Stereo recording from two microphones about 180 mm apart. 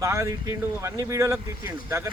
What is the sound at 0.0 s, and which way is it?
Speech, 15° right (ahead or behind).